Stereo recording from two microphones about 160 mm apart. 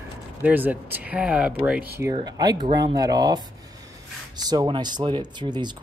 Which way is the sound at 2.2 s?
25° right (ahead or behind).